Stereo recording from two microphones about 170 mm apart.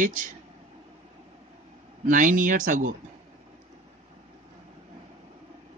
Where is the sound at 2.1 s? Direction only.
50° right (ahead or behind).